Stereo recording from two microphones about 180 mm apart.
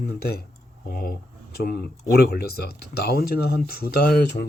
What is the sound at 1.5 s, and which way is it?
Speech, 60° left (ahead or behind).